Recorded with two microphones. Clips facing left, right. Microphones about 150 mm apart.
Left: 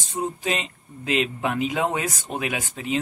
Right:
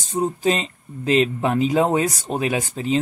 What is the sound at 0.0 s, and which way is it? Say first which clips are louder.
Speech: right 7 dB; 40° right (ahead or behind).